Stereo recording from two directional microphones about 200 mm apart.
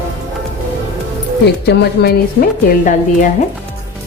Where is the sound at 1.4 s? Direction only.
55° left (ahead or behind).